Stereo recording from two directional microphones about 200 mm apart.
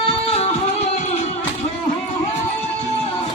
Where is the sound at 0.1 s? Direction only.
30° left (ahead or behind).